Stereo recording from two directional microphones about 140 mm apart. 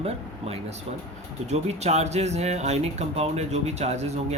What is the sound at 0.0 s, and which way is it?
Speech, 45° right (ahead or behind).